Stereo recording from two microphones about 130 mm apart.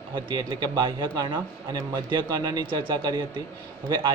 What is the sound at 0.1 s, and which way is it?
Speech, 40° right (ahead or behind).